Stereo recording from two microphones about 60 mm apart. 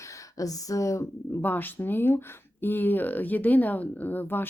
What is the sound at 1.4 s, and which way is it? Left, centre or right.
Speech, left.